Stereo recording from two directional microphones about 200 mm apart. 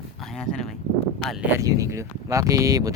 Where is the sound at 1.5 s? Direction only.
15° right (ahead or behind).